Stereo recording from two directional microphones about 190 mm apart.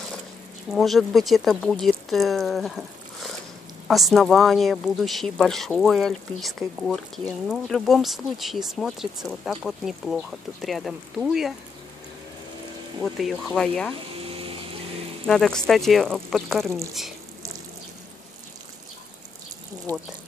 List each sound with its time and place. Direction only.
0.7 s speech: centre (ahead or behind)
3.8 s speech: centre (ahead or behind)
13.0 s speech: centre (ahead or behind)
14.2 s pump: 30° right (ahead or behind)
15.2 s speech: 5° left (ahead or behind)